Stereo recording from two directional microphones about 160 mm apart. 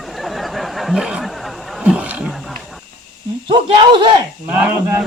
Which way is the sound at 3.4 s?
30° right (ahead or behind).